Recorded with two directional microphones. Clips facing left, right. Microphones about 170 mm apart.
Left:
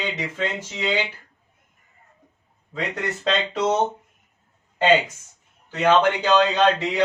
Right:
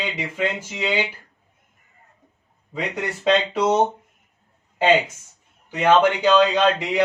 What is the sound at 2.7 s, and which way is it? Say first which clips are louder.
Speech: right 1 dB; 10° right (ahead or behind).